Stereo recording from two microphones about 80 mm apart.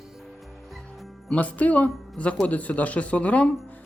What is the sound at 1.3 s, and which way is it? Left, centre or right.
Speech, centre.